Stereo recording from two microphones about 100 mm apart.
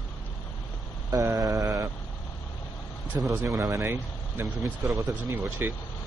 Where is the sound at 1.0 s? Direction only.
30° right (ahead or behind).